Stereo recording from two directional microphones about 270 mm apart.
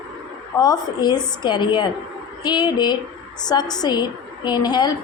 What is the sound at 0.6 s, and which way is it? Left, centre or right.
A woman's voice, centre.